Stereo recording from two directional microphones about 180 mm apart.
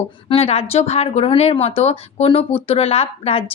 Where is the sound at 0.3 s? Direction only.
35° left (ahead or behind).